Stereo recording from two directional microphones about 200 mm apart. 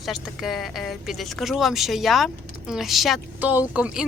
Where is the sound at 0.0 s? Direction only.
Centre (ahead or behind).